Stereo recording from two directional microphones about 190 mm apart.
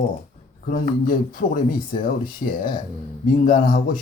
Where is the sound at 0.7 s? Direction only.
45° left (ahead or behind).